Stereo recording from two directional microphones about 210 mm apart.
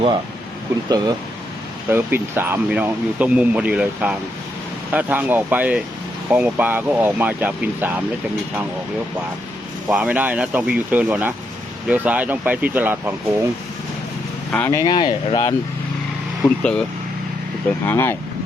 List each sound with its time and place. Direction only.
0.9 s speech: 20° right (ahead or behind)
9.9 s speech: 5° right (ahead or behind)
14.5 s speech: 10° left (ahead or behind)
16.4 s speech: 5° left (ahead or behind)
17.8 s speech: 10° left (ahead or behind)